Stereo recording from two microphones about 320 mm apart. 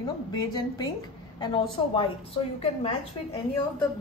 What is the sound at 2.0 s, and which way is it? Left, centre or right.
Speech, centre.